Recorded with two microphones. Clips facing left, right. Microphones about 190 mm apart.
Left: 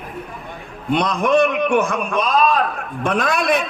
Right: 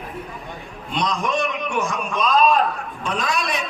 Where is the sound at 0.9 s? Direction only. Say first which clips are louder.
Left 7 dB; 60° left (ahead or behind).